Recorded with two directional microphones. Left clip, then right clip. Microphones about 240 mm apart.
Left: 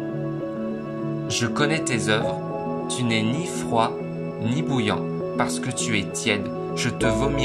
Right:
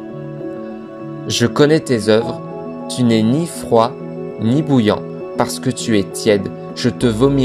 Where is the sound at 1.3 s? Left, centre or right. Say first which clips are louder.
Right 11 dB; right.